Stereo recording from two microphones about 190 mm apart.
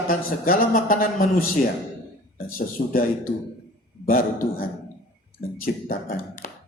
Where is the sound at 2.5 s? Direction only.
50° left (ahead or behind).